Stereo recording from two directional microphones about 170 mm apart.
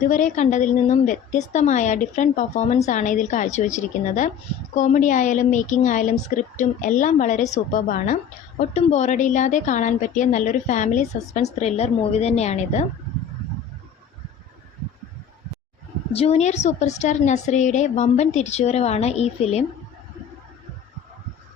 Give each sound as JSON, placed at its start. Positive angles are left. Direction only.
{"t": 0.0, "sound": "a woman's voice", "side_deg": 50}
{"t": 16.1, "sound": "a woman's voice", "side_deg": 40}